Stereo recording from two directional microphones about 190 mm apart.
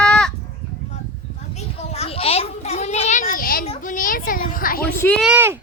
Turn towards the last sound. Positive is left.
turn(degrees=-10)  # may be behind; listen again after turning